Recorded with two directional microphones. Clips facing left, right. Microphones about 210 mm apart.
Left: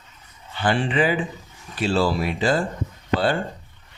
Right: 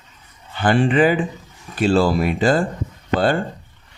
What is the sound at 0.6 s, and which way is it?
Speech, 50° right (ahead or behind).